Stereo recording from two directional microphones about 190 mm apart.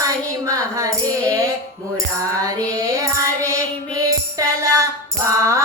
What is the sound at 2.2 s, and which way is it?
Music, 15° right (ahead or behind).